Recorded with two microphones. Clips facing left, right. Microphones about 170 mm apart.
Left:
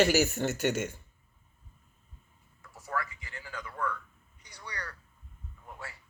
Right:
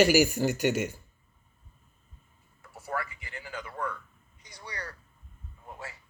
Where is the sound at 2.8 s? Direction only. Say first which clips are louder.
Right 1 dB; 25° right (ahead or behind).